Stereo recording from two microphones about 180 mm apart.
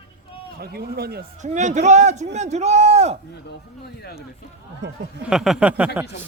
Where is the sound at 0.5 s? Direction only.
60° right (ahead or behind).